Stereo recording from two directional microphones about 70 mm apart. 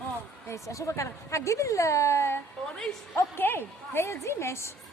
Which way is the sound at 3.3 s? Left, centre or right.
Left.